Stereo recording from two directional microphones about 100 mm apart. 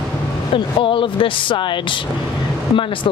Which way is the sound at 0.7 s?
55° left (ahead or behind).